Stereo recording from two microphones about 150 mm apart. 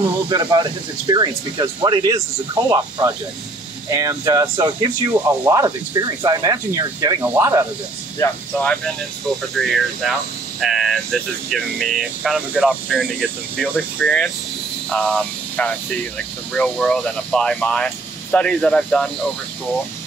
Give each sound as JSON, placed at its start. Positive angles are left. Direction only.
{"t": 0.3, "sound": "speech", "side_deg": -30}
{"t": 8.2, "sound": "speech", "side_deg": 10}
{"t": 9.6, "sound": "speech", "side_deg": 0}
{"t": 13.9, "sound": "speech", "side_deg": 10}